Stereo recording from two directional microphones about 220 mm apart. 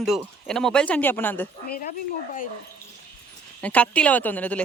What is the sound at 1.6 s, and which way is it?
Speech, 45° left (ahead or behind).